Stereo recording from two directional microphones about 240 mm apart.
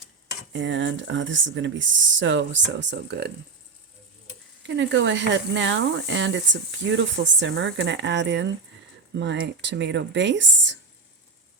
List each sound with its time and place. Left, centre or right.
0.5 s speech: right
4.6 s speech: right